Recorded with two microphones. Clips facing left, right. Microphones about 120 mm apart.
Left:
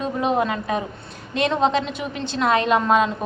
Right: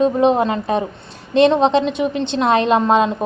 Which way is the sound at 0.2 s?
30° right (ahead or behind).